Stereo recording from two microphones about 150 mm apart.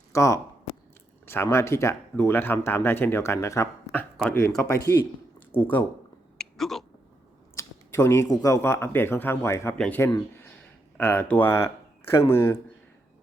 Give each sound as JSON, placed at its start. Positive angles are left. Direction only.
{"t": 0.1, "sound": "speech", "side_deg": 20}
{"t": 5.5, "sound": "speech", "side_deg": 10}
{"t": 6.3, "sound": "a sound", "side_deg": 5}
{"t": 7.5, "sound": "speech", "side_deg": 15}
{"t": 9.7, "sound": "speech", "side_deg": 5}
{"t": 10.3, "sound": "a sound", "side_deg": 15}
{"t": 12.3, "sound": "speech", "side_deg": 15}